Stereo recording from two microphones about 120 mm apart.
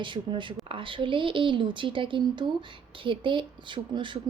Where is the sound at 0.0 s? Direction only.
45° right (ahead or behind).